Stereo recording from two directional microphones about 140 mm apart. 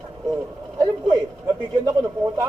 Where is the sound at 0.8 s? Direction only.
30° right (ahead or behind).